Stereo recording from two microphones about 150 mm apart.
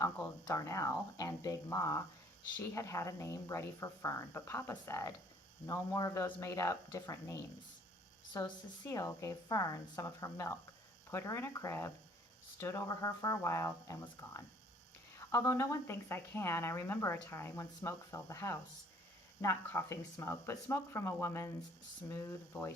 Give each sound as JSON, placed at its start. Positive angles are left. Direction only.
{"t": 0.0, "sound": "a woman's voice", "side_deg": 20}